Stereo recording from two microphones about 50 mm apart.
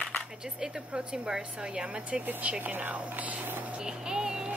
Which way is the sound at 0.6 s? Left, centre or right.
Centre.